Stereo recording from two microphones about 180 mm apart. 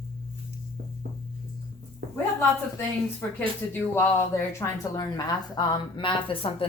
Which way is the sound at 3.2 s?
10° left (ahead or behind).